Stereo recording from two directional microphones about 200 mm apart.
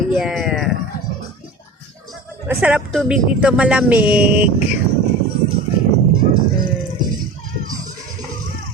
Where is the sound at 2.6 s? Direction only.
5° right (ahead or behind).